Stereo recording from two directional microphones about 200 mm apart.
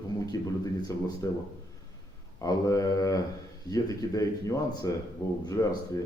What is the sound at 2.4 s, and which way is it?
Speech, 15° left (ahead or behind).